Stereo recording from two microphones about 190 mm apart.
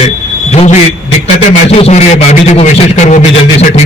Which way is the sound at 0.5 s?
35° left (ahead or behind).